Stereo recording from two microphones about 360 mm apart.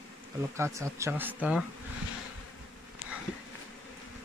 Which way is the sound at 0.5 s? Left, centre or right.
Centre.